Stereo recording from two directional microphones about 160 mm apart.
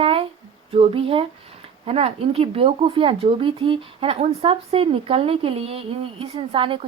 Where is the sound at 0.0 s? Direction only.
35° right (ahead or behind).